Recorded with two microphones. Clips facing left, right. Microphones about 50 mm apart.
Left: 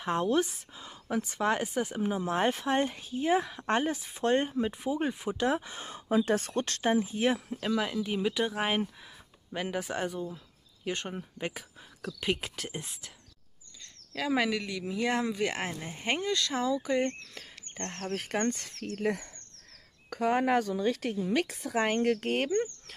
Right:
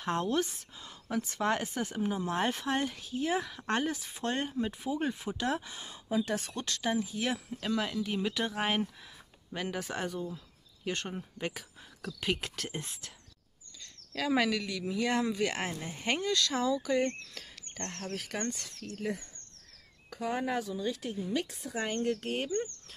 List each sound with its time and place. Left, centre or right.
0.0 s speech: centre
4.2 s speech: left
5.7 s speech: left
7.5 s speech: centre
14.1 s speech: centre
18.1 s a woman's voice: left